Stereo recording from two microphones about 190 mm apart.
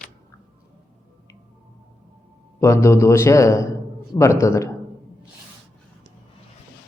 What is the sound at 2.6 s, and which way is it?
A man's voice, 15° left (ahead or behind).